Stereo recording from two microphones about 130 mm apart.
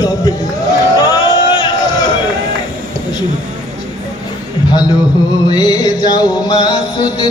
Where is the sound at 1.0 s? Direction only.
30° left (ahead or behind).